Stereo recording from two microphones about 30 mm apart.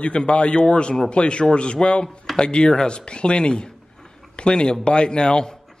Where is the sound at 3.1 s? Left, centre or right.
Left.